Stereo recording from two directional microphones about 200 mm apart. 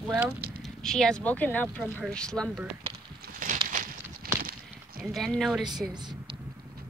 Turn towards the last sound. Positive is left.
turn(degrees=0)  # may be behind; listen again after turning